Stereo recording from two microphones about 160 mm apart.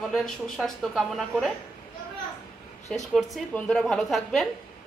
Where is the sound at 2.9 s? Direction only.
Centre (ahead or behind).